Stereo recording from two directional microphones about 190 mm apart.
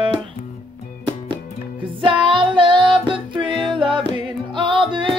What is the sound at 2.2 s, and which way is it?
Music, 25° right (ahead or behind).